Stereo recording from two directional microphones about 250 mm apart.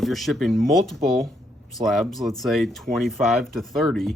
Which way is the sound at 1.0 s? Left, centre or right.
Right.